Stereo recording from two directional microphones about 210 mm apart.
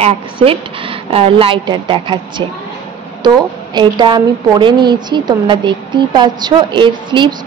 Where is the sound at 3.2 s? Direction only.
20° right (ahead or behind).